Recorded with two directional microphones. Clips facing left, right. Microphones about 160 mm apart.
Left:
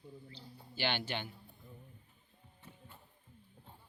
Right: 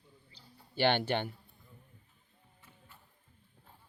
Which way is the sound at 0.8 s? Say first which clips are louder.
Right 8 dB; 55° right (ahead or behind).